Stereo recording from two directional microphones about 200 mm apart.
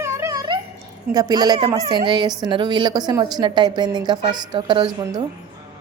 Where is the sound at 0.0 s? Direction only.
15° right (ahead or behind).